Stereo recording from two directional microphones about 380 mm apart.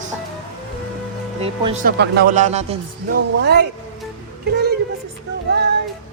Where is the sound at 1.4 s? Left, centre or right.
Centre.